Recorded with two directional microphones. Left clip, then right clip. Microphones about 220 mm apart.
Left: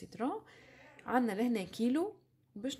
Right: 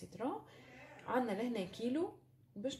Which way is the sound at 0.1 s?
50° left (ahead or behind).